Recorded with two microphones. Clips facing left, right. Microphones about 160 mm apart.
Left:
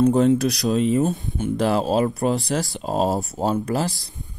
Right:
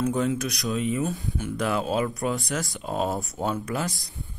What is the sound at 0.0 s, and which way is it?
Speech, 35° left (ahead or behind).